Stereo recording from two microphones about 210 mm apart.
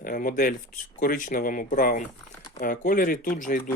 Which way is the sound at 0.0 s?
40° left (ahead or behind).